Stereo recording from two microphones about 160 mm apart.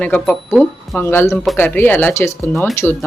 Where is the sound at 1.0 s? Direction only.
15° left (ahead or behind).